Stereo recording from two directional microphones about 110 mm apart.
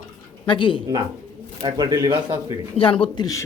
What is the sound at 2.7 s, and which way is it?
Speech, 55° left (ahead or behind).